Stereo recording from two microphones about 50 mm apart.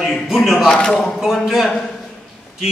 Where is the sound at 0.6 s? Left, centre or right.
Centre.